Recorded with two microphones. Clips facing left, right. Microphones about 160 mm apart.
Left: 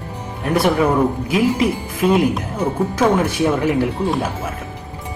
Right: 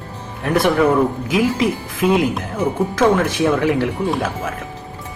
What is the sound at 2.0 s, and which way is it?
Speech, 5° right (ahead or behind).